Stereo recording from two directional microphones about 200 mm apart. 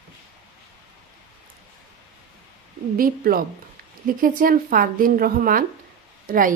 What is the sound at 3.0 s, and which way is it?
A woman's voice, 45° right (ahead or behind).